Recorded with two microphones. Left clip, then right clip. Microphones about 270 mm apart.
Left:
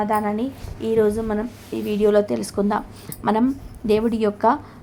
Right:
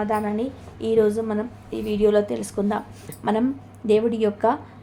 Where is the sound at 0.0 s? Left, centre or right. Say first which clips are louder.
Left 2 dB; centre.